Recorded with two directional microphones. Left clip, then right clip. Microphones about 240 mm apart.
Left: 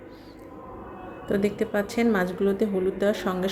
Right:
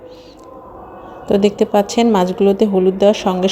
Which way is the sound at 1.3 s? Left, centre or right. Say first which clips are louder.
Right 12 dB; right.